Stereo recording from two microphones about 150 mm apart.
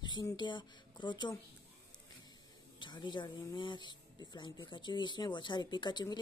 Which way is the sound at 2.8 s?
30° left (ahead or behind).